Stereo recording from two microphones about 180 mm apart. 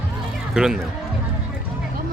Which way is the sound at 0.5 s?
5° right (ahead or behind).